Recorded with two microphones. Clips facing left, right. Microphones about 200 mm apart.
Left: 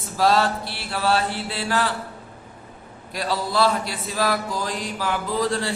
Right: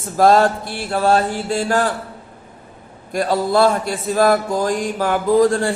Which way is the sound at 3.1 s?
50° right (ahead or behind).